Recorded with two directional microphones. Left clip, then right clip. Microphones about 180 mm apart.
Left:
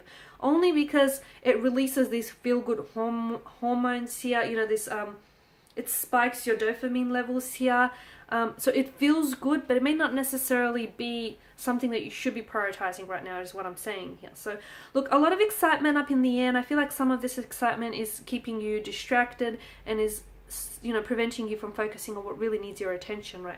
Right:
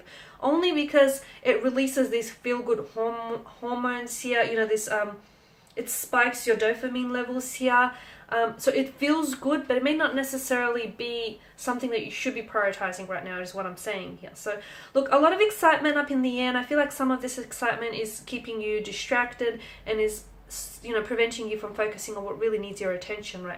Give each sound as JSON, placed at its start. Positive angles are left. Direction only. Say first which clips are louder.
{"t": 0.4, "sound": "speech", "louder": "even", "side_deg": 40}